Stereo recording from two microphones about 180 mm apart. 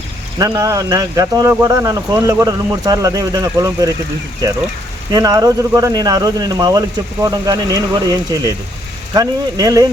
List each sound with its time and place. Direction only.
0.3 s speech: 20° right (ahead or behind)